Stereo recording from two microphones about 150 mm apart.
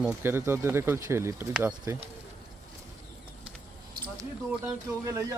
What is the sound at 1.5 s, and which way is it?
Speech, 5° right (ahead or behind).